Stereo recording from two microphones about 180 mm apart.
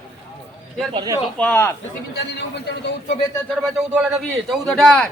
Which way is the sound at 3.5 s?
Centre (ahead or behind).